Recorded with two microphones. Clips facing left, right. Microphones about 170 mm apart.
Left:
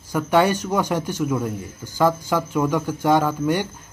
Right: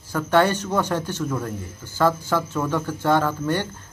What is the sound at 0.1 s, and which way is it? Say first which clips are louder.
A man's voice: left 1 dB; 10° left (ahead or behind).